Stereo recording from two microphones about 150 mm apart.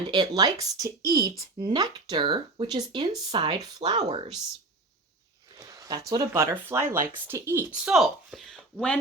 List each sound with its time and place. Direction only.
0.1 s speech: 30° right (ahead or behind)
5.5 s speech: 25° right (ahead or behind)
7.9 s speech: centre (ahead or behind)